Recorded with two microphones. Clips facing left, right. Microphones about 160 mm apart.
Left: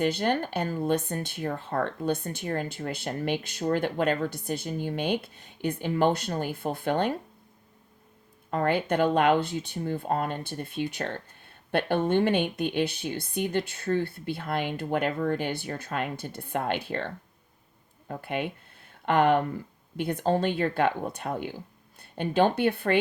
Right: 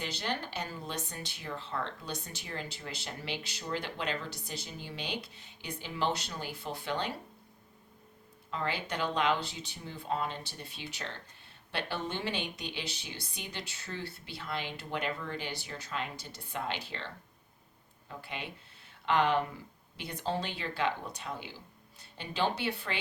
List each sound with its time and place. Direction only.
0.0 s speech: 50° left (ahead or behind)
8.4 s speech: 50° left (ahead or behind)
18.1 s speech: 55° left (ahead or behind)